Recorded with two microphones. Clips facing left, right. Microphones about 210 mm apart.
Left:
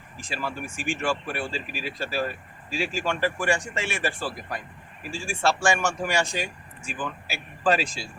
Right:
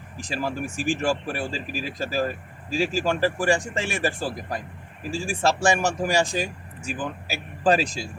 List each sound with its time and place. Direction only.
0.2 s speech: 40° right (ahead or behind)